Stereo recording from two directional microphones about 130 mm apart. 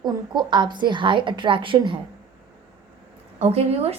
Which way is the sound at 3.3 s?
55° right (ahead or behind).